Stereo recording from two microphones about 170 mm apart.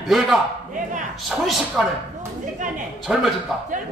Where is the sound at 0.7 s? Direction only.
45° right (ahead or behind).